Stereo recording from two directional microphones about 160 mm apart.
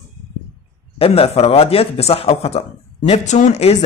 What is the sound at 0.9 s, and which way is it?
Speech, 35° left (ahead or behind).